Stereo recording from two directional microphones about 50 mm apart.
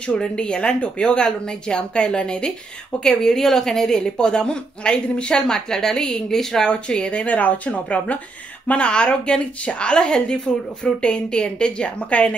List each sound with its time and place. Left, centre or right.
0.0 s a woman's voice: centre
6.7 s a woman's voice: left